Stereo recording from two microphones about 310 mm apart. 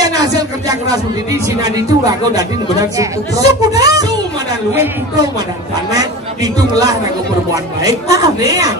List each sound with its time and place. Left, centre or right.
0.0 s speech: centre
5.9 s speech: centre